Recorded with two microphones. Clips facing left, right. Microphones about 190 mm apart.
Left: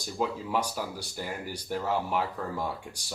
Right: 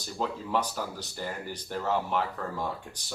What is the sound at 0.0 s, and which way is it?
Speech, 10° left (ahead or behind).